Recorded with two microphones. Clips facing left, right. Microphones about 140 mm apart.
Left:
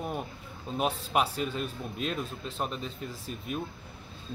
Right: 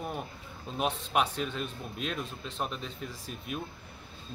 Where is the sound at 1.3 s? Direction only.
5° left (ahead or behind).